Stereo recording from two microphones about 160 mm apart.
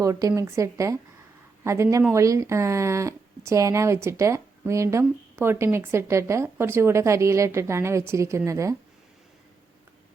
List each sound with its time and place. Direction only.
0.0 s a woman's voice: 20° right (ahead or behind)